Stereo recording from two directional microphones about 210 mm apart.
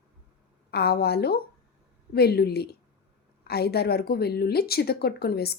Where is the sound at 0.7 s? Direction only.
50° left (ahead or behind).